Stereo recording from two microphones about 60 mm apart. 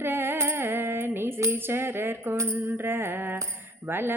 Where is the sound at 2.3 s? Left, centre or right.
Right.